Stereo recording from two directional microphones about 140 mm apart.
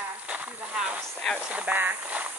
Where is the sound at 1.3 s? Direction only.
10° right (ahead or behind).